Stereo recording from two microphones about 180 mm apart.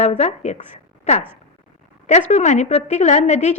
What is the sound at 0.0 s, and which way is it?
A woman's voice, 35° left (ahead or behind).